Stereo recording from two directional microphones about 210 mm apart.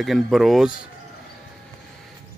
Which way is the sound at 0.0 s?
Centre (ahead or behind).